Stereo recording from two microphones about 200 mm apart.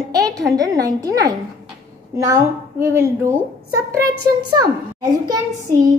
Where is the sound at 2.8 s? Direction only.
15° right (ahead or behind).